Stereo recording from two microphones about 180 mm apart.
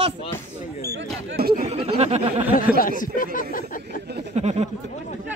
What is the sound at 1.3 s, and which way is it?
Speech, 60° right (ahead or behind).